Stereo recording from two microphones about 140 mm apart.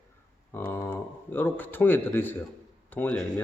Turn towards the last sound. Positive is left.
turn(degrees=10)  # may be behind; listen again after turning